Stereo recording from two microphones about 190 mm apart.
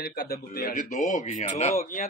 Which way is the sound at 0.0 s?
55° left (ahead or behind).